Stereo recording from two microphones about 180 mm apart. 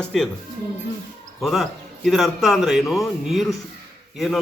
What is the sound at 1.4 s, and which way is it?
A man's voice, centre (ahead or behind).